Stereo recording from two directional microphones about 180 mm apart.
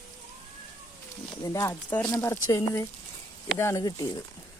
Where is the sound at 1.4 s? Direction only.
20° left (ahead or behind).